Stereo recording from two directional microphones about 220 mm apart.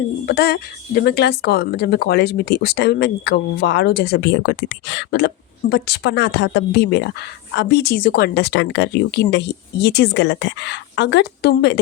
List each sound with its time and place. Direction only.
0.3 s speech: 45° left (ahead or behind)